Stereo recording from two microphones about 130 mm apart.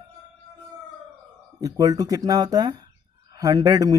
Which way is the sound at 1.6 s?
30° right (ahead or behind).